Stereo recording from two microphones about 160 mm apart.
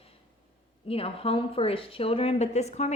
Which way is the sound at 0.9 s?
35° left (ahead or behind).